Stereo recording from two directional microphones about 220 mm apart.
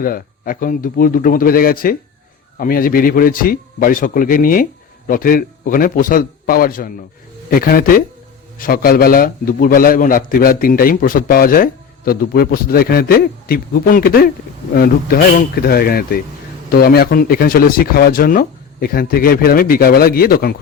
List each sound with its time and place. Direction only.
0.0 s a man's voice: 40° left (ahead or behind)